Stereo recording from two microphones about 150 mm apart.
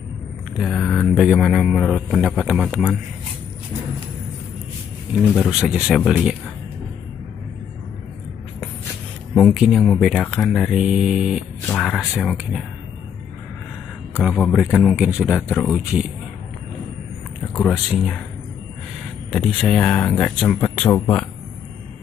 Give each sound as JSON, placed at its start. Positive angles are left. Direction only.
{"t": 0.6, "sound": "speech", "side_deg": 5}
{"t": 5.5, "sound": "speech", "side_deg": -5}
{"t": 9.3, "sound": "speech", "side_deg": 0}
{"t": 11.6, "sound": "speech", "side_deg": 10}
{"t": 14.2, "sound": "speech", "side_deg": 0}
{"t": 17.8, "sound": "speech", "side_deg": 0}
{"t": 19.3, "sound": "speech", "side_deg": 5}